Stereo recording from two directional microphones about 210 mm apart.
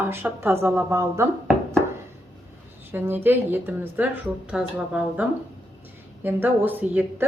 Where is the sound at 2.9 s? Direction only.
10° right (ahead or behind).